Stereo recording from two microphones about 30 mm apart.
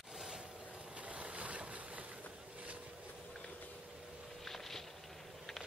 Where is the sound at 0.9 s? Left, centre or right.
Right.